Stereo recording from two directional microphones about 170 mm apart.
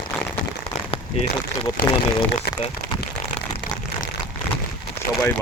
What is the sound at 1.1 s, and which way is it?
Speech, 35° left (ahead or behind).